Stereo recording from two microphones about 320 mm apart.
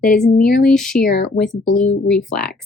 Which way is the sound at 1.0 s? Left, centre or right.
Left.